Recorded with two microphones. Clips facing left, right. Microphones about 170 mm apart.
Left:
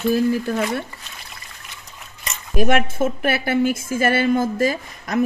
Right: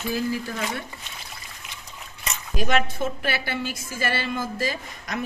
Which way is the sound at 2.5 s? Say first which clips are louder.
Left 6 dB; 50° left (ahead or behind).